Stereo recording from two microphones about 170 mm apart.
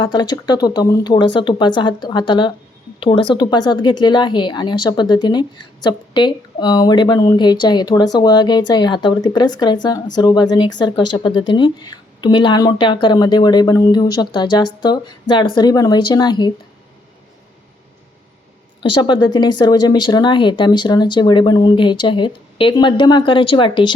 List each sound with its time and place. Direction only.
0.0 s speech: 25° left (ahead or behind)
18.8 s speech: 25° left (ahead or behind)